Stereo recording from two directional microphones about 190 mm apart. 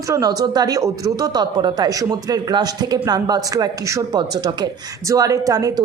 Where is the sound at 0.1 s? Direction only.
20° right (ahead or behind).